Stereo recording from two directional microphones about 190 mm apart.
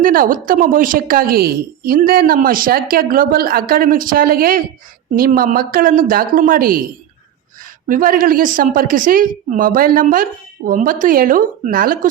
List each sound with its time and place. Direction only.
0.0 s a woman's voice: 45° right (ahead or behind)
7.9 s a woman's voice: 45° right (ahead or behind)